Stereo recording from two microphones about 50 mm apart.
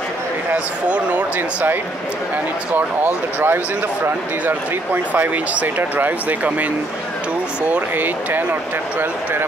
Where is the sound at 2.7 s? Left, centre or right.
Right.